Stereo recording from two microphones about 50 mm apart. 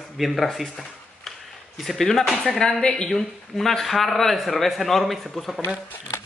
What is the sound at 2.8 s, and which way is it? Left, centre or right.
Speech, centre.